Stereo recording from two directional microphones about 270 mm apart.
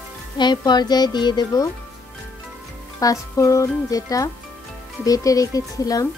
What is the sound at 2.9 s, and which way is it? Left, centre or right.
Speech, centre.